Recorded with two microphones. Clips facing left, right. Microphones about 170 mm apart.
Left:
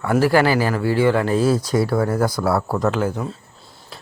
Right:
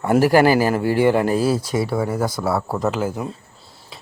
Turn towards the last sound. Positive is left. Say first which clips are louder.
# left 1 dB
turn(degrees=-5)  # may be behind; listen again after turning